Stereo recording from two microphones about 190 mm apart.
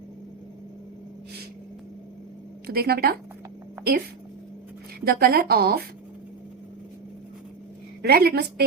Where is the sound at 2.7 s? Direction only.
55° right (ahead or behind).